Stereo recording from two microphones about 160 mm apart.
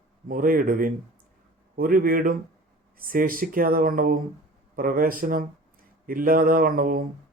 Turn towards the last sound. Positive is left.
turn(degrees=-60)  # may be behind; listen again after turning